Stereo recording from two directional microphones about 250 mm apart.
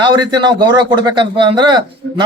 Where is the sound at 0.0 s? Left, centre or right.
Centre.